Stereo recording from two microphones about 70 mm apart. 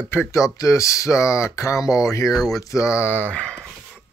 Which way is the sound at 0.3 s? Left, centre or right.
Left.